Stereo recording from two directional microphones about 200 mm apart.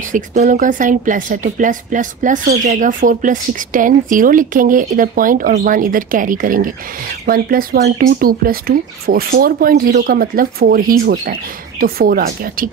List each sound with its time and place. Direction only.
0.1 s speech: 40° right (ahead or behind)